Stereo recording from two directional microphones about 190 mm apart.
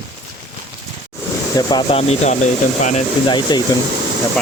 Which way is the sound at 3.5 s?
20° left (ahead or behind).